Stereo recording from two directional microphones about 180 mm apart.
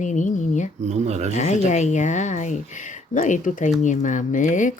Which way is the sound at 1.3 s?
40° left (ahead or behind).